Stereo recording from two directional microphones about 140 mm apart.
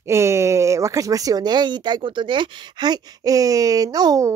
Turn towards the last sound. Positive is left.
turn(degrees=-25)  # may be behind; listen again after turning